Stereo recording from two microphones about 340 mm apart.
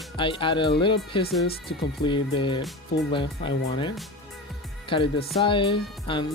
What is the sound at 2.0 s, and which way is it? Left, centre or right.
Speech, centre.